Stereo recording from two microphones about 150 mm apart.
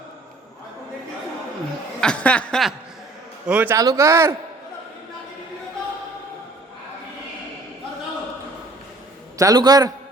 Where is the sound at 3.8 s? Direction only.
20° right (ahead or behind).